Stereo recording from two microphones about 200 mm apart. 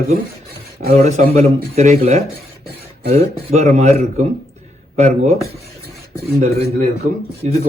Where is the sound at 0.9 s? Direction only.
35° right (ahead or behind).